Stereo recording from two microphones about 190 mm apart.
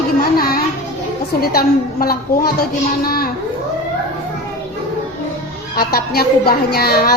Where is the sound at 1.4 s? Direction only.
50° left (ahead or behind).